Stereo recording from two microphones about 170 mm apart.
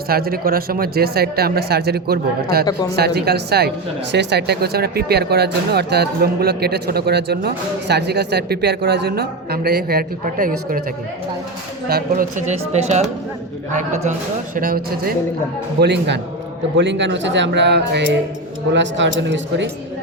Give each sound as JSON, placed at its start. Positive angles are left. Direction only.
{"t": 0.1, "sound": "speech", "side_deg": -60}
{"t": 4.1, "sound": "speech", "side_deg": -85}
{"t": 11.9, "sound": "speech", "side_deg": -60}
{"t": 14.5, "sound": "speech", "side_deg": -60}
{"t": 15.8, "sound": "a man's voice", "side_deg": -85}